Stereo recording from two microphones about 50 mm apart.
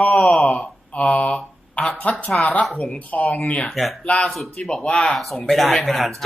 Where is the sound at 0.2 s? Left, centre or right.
Centre.